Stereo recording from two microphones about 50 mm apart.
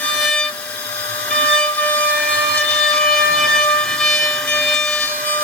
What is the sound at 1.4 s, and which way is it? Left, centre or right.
Steam whistle, left.